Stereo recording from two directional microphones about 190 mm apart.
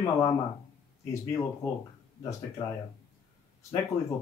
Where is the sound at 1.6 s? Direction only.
15° left (ahead or behind).